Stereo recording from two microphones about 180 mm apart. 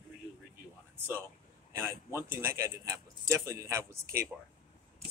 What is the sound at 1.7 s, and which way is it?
Speech, 15° right (ahead or behind).